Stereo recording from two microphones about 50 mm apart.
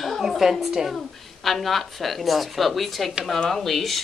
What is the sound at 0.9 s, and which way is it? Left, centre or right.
A woman's voice, centre.